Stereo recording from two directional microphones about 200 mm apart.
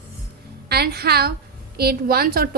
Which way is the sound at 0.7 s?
50° right (ahead or behind).